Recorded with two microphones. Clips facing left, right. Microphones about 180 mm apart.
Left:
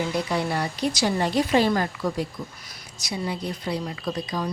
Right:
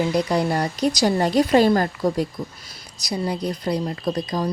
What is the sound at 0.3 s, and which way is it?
Speech, 40° right (ahead or behind).